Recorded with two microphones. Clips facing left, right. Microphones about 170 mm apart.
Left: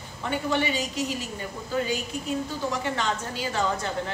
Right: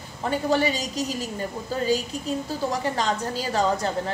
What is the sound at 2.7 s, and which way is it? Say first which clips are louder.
A woman's voice: right 3 dB; 35° right (ahead or behind).